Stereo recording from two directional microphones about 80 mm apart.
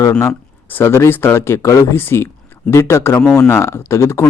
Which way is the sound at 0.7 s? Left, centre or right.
Left.